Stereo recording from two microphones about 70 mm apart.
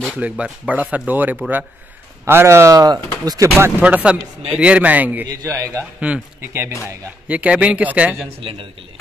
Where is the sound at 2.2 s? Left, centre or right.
Right.